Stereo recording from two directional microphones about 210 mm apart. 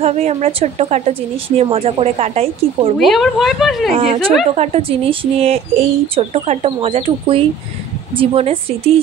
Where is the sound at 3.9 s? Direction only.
25° right (ahead or behind).